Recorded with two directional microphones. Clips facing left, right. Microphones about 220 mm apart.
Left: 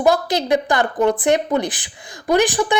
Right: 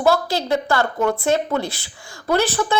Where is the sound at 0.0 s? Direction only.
20° left (ahead or behind).